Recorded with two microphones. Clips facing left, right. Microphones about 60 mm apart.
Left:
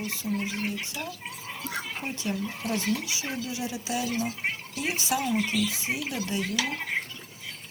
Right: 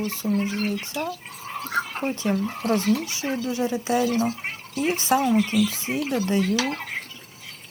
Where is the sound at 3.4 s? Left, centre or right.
Right.